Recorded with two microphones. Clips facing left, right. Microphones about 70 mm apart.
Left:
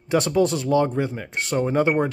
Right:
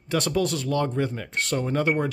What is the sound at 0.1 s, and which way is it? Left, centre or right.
Speech, left.